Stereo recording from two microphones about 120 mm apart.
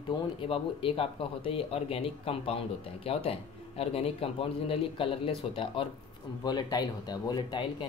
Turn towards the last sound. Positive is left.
turn(degrees=40)  # may be behind; listen again after turning